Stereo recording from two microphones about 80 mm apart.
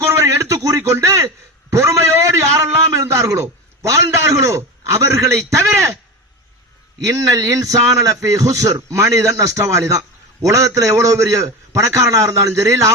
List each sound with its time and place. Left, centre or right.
0.0 s a sound: right
5.5 s a man's voice: right
7.1 s a man's voice: right